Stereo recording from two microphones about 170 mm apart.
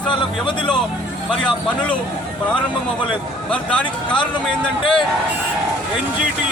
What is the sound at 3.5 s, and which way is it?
Speech, 5° left (ahead or behind).